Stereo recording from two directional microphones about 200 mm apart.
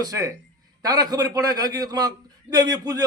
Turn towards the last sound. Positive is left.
turn(degrees=-20)  # may be behind; listen again after turning